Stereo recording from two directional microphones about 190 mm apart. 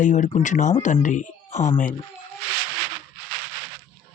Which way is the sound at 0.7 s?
40° left (ahead or behind).